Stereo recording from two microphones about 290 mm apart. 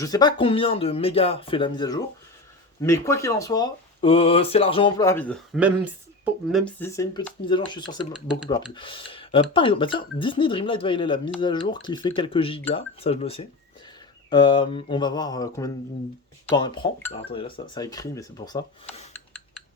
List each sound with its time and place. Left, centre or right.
0.0 s speech: centre
5.5 s speech: centre
8.1 s speech: centre
8.7 s speech: centre